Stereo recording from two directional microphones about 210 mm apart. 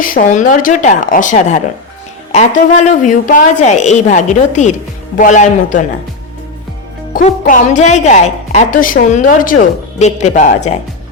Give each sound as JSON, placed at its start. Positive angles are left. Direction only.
{"t": 0.0, "sound": "a woman's voice", "side_deg": 40}
{"t": 7.1, "sound": "a woman's voice", "side_deg": 40}